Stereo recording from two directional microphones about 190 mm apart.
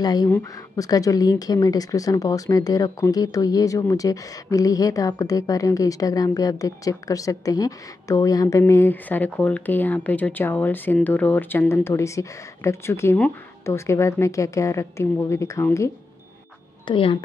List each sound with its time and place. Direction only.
0.0 s speech: 20° left (ahead or behind)
16.8 s speech: 25° left (ahead or behind)